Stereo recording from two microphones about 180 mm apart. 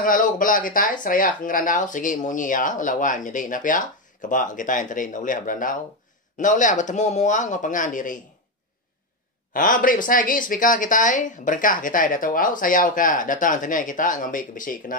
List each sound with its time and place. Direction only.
0.0 s speech: 50° left (ahead or behind)
9.5 s speech: 50° left (ahead or behind)